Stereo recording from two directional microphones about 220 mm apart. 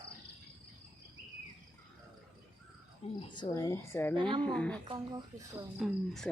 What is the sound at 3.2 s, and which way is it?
Speech, 20° left (ahead or behind).